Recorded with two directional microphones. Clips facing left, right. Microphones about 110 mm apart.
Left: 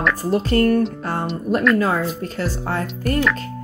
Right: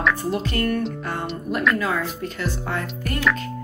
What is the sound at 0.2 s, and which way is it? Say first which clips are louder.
Speech: left 6 dB; 40° left (ahead or behind).